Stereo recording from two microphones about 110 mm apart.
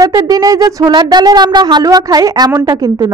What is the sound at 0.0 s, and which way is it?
A woman's voice, 35° right (ahead or behind).